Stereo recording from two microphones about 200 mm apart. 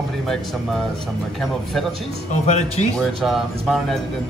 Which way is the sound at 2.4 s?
35° left (ahead or behind).